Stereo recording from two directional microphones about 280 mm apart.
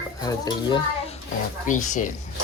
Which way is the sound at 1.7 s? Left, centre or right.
Left.